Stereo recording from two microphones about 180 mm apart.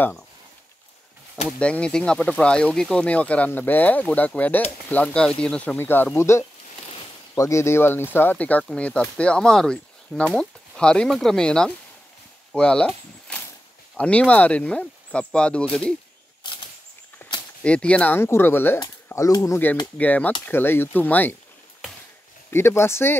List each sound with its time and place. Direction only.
1.6 s speech: 5° left (ahead or behind)
17.2 s a sound: 10° left (ahead or behind)
17.6 s speech: 5° left (ahead or behind)
22.5 s speech: 15° left (ahead or behind)